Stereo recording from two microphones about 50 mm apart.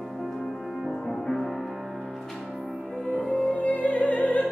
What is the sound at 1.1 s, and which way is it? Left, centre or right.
Music, centre.